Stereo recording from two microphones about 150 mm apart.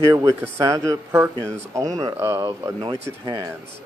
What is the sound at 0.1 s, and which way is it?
A man's voice, 20° right (ahead or behind).